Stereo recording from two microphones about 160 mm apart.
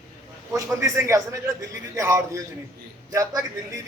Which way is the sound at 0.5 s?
20° right (ahead or behind).